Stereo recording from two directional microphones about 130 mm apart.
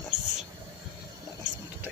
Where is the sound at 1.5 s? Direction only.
5° right (ahead or behind).